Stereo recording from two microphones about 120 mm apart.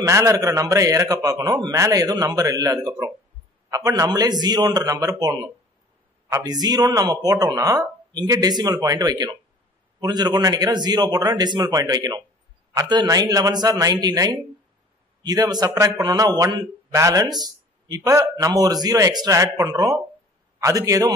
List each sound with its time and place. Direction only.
0.0 s a man's voice: 25° right (ahead or behind)
6.4 s a man's voice: 35° right (ahead or behind)